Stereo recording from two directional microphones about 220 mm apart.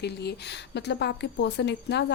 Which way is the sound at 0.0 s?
50° left (ahead or behind).